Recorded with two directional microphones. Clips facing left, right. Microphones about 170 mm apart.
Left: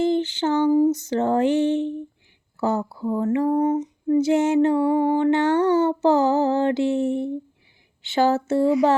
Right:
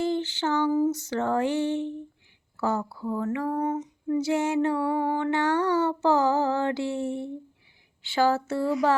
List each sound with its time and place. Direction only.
0.0 s female singing: 20° left (ahead or behind)